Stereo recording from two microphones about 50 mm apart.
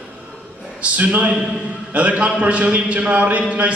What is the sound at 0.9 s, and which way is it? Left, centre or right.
A man's voice, right.